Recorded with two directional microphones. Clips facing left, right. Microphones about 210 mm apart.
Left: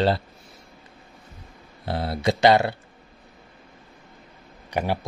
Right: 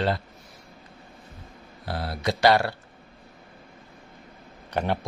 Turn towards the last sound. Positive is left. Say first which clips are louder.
# left 1 dB
turn(degrees=10)  # may be behind; listen again after turning